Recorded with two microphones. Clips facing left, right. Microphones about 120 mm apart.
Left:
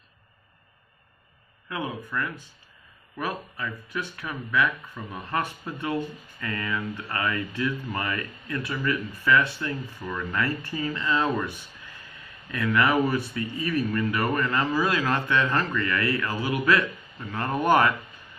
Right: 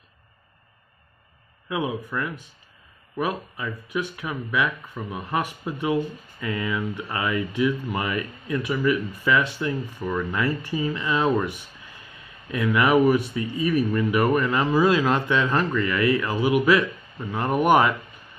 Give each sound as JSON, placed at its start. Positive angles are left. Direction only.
{"t": 1.7, "sound": "speech", "side_deg": -15}